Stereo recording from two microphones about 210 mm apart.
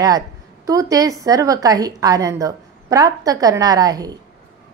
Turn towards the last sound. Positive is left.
turn(degrees=-15)  # may be behind; listen again after turning